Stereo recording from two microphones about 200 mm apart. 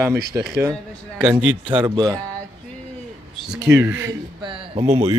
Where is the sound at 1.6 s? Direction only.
25° right (ahead or behind).